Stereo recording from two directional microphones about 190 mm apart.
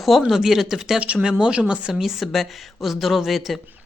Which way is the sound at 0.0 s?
Centre (ahead or behind).